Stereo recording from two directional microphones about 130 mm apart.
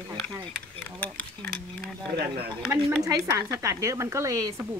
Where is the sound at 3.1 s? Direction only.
25° right (ahead or behind).